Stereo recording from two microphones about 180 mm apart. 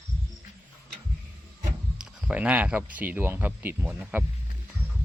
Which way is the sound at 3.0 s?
10° right (ahead or behind).